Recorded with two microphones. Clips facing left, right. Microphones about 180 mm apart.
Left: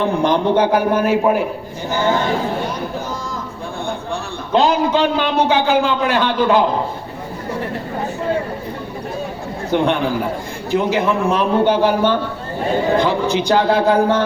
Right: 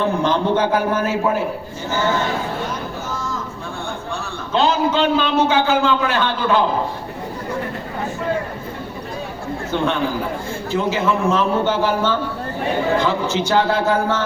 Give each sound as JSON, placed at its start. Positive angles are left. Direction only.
{"t": 0.0, "sound": "a man's voice", "side_deg": 15}
{"t": 4.5, "sound": "a man's voice", "side_deg": 15}
{"t": 9.7, "sound": "a man's voice", "side_deg": 15}